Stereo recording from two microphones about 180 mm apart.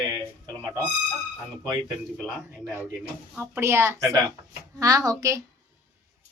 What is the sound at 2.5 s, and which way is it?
A woman's voice, 15° right (ahead or behind).